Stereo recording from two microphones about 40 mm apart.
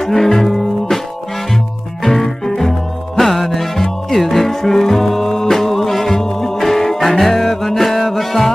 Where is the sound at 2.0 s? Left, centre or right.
Centre.